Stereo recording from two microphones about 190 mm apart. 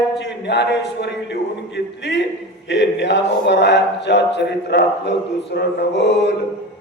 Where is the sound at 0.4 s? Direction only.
65° left (ahead or behind).